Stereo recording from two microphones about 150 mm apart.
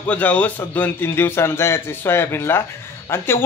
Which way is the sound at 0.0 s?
10° left (ahead or behind).